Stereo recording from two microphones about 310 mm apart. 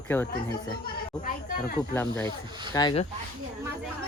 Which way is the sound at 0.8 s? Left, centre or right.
Left.